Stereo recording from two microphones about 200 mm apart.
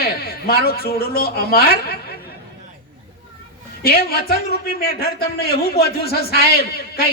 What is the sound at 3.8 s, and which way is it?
A man's voice, 50° left (ahead or behind).